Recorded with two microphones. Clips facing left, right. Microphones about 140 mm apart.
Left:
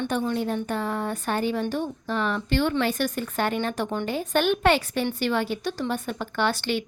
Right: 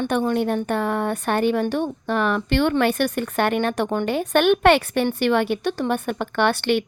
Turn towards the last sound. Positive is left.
turn(degrees=-60)  # may be behind; listen again after turning